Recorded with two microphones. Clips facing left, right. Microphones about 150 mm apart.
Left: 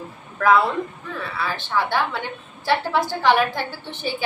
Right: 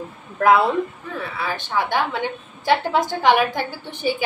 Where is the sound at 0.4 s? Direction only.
20° right (ahead or behind).